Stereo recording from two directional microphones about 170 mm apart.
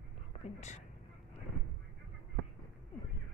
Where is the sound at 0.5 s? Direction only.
45° left (ahead or behind).